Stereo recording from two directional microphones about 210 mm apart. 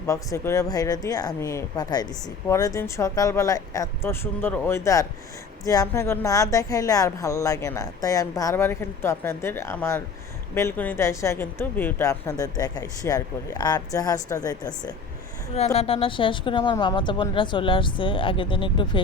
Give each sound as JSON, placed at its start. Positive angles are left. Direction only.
{"t": 0.1, "sound": "a woman's voice", "side_deg": 15}
{"t": 15.5, "sound": "speech", "side_deg": 30}